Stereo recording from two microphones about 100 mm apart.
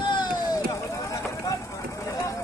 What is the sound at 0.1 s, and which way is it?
Vehicle, 50° left (ahead or behind).